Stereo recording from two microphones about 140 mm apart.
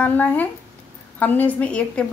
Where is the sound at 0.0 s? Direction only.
10° left (ahead or behind).